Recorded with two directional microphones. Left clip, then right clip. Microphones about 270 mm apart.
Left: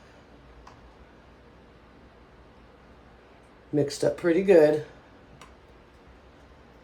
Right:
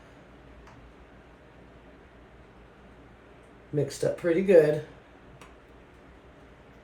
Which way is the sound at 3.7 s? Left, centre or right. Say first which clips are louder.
Left 3 dB; left.